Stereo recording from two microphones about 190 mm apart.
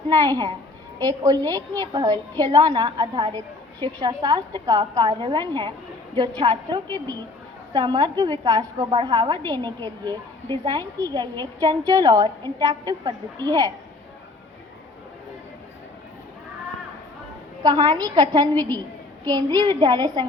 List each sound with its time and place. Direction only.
0.1 s a woman's voice: 20° right (ahead or behind)
17.6 s a woman's voice: 20° right (ahead or behind)